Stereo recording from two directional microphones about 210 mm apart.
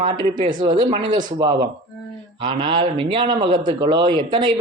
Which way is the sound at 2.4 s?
25° right (ahead or behind).